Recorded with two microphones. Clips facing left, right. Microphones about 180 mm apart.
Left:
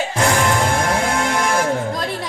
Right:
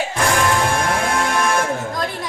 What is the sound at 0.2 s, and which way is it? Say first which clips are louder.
Music: left 1 dB; 25° left (ahead or behind).